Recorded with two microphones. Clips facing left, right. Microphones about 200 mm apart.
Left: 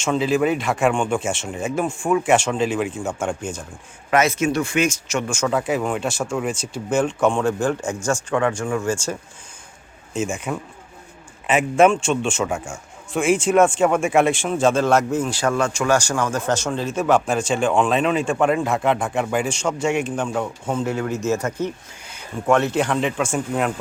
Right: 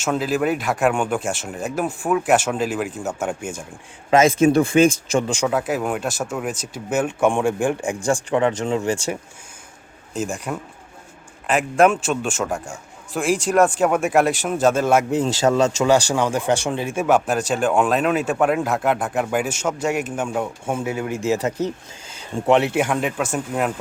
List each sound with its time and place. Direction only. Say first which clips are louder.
0.0 s speech: left 2 dB; centre (ahead or behind)
4.1 s speech: right 4 dB; 30° right (ahead or behind)
5.3 s speech: right 1 dB; 15° right (ahead or behind)
5.5 s speech: even; centre (ahead or behind); by 9.1 s 20° right (ahead or behind)
10.2 s speech: left 1 dB; centre (ahead or behind)
15.2 s speech: right 3 dB; 20° right (ahead or behind)
22.4 s speech: right 1 dB; 20° right (ahead or behind); by 23.8 s 5° right (ahead or behind)